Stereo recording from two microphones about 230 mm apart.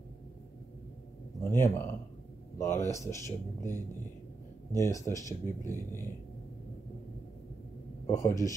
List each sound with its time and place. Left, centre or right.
1.4 s speech: centre
4.7 s speech: centre
8.1 s speech: centre